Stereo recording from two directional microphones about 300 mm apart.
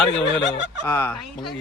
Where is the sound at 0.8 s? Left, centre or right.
Centre.